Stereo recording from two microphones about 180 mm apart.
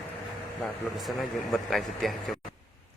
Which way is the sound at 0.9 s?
Centre (ahead or behind).